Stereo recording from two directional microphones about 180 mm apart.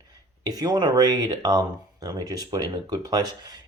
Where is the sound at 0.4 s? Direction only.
20° right (ahead or behind).